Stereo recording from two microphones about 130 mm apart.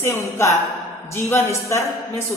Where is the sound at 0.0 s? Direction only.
20° left (ahead or behind).